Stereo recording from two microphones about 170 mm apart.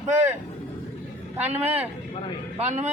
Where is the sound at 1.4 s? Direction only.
10° right (ahead or behind).